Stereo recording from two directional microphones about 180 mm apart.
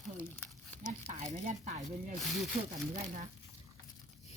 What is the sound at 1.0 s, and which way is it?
Speech, 40° right (ahead or behind).